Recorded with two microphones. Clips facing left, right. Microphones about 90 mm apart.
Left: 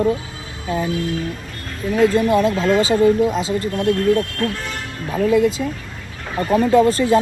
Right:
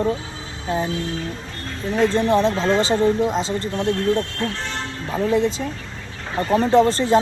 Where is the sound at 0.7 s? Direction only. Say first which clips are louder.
Left 2 dB; 30° right (ahead or behind).